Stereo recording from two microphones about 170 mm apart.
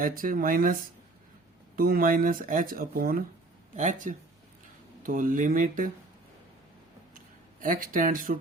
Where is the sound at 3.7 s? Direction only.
45° right (ahead or behind).